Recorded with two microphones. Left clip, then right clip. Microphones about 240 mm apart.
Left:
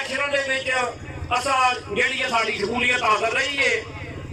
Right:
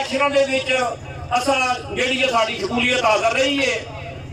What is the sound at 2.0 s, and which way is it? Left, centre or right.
A man's voice, right.